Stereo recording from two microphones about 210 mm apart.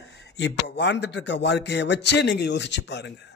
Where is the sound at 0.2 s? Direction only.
55° left (ahead or behind).